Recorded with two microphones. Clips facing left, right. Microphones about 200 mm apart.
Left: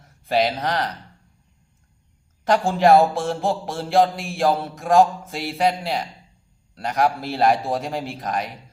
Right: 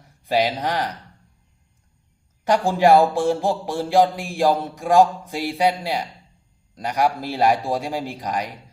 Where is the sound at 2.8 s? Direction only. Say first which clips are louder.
Even; 15° right (ahead or behind).